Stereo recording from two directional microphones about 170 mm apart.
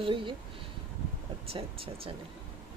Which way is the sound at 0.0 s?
30° right (ahead or behind).